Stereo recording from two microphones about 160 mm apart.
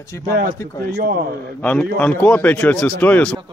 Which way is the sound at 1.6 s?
10° left (ahead or behind).